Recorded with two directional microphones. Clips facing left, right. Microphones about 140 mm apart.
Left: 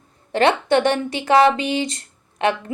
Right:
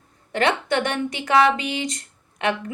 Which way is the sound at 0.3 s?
30° left (ahead or behind).